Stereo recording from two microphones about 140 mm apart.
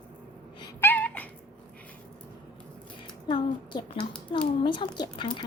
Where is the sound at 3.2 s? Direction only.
30° left (ahead or behind).